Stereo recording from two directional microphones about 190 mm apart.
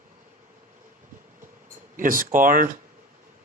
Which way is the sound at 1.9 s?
45° right (ahead or behind).